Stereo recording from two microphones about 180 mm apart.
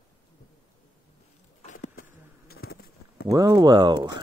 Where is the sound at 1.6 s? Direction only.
45° left (ahead or behind).